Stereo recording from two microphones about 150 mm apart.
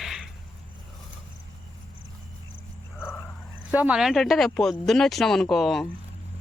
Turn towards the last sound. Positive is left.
turn(degrees=0)  # may be behind; listen again after turning